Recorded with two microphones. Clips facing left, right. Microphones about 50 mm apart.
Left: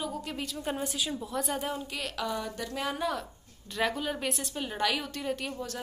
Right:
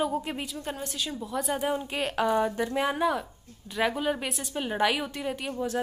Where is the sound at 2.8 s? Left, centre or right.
Centre.